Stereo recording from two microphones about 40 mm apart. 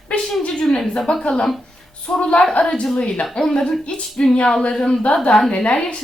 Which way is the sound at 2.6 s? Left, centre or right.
Left.